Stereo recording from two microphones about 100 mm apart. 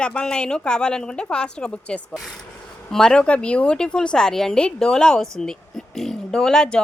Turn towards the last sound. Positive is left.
turn(degrees=5)  # may be behind; listen again after turning